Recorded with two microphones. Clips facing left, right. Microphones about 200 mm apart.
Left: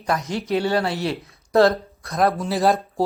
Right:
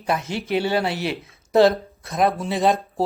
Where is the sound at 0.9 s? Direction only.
25° left (ahead or behind).